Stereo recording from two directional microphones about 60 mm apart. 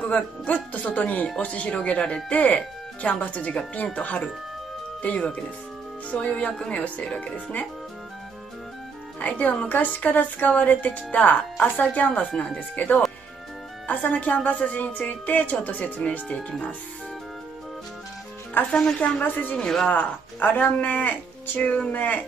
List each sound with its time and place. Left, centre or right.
0.0 s speech: left
9.2 s speech: left
18.7 s speech: centre
19.2 s speech: left
19.5 s speech: centre
19.9 s speech: left
21.9 s speech: left